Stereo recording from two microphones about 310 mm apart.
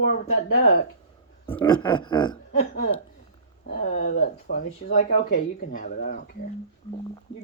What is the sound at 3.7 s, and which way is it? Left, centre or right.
Speech, left.